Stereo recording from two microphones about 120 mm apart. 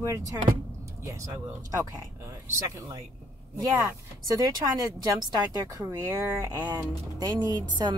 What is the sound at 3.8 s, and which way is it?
Speech, 30° right (ahead or behind).